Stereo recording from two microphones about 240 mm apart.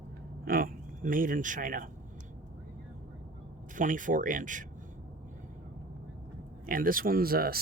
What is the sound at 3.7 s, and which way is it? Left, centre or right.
Speech, right.